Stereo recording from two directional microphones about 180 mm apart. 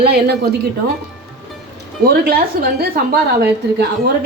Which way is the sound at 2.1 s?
60° right (ahead or behind).